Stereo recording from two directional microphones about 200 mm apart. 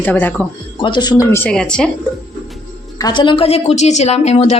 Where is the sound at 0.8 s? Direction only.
20° left (ahead or behind); by 1.9 s 5° left (ahead or behind).